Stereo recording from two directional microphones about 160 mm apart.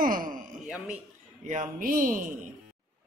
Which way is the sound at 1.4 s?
50° right (ahead or behind).